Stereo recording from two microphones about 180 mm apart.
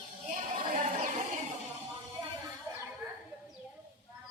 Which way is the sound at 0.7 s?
45° right (ahead or behind).